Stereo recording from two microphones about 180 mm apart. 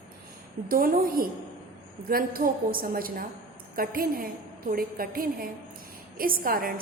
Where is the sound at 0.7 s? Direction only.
55° right (ahead or behind).